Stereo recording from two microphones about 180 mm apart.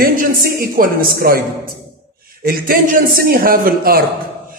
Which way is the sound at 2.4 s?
55° right (ahead or behind).